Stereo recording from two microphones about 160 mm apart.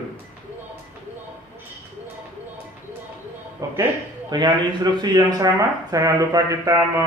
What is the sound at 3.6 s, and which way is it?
Speech, 20° right (ahead or behind).